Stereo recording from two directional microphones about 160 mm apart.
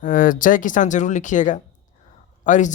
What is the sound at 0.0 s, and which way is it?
A man's voice, 60° left (ahead or behind).